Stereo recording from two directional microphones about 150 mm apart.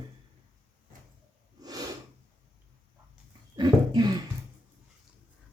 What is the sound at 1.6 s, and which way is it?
Snort, 25° right (ahead or behind).